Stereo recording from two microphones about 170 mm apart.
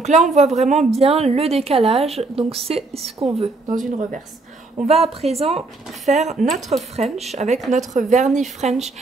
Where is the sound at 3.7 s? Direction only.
50° right (ahead or behind).